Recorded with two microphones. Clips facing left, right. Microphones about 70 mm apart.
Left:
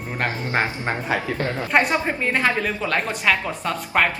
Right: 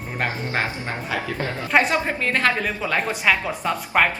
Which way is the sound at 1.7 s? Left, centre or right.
Centre.